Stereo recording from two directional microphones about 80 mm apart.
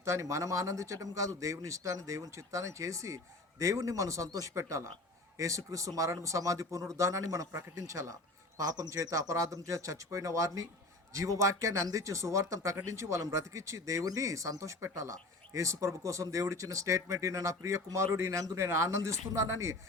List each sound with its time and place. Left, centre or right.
0.0 s speech: right
8.5 s speech: right